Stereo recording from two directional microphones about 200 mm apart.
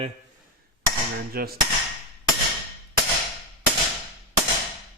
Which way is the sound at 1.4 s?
50° right (ahead or behind).